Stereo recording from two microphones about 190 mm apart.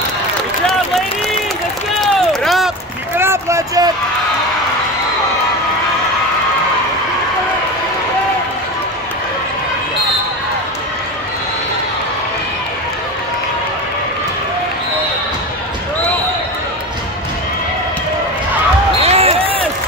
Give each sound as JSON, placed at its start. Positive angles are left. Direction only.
{"t": 2.4, "sound": "run", "side_deg": 0}
{"t": 3.2, "sound": "a sound", "side_deg": -15}
{"t": 18.9, "sound": "basketball bounce", "side_deg": -30}